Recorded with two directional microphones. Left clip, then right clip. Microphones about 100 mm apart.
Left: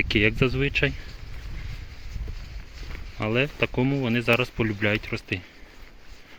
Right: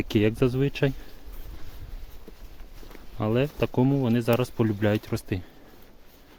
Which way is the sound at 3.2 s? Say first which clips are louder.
Left 1 dB; 55° right (ahead or behind).